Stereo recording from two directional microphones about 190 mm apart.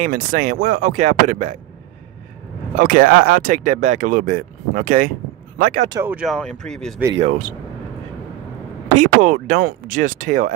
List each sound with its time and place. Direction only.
0.0 s speech: 45° right (ahead or behind)
2.7 s speech: 45° right (ahead or behind)
5.9 s speech: 15° right (ahead or behind)
6.1 s speech: centre (ahead or behind)
7.2 s speech: 35° right (ahead or behind)
8.9 s speech: 40° right (ahead or behind)